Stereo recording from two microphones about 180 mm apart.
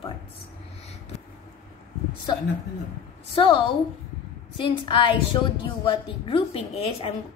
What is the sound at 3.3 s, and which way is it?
A woman's voice, 30° left (ahead or behind).